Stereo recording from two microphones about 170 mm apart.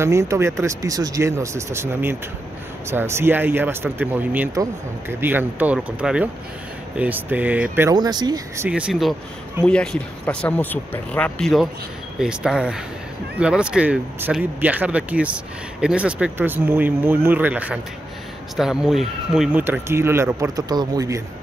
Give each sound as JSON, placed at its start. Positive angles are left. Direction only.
{"t": 0.0, "sound": "speech", "side_deg": -15}
{"t": 7.9, "sound": "speech", "side_deg": -25}
{"t": 8.6, "sound": "speech", "side_deg": -5}
{"t": 9.7, "sound": "speech", "side_deg": 5}